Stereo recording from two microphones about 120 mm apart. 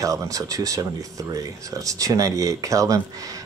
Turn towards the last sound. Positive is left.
turn(degrees=-30)  # may be behind; listen again after turning